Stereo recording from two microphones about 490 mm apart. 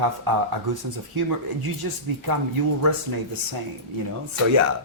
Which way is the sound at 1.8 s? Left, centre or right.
Right.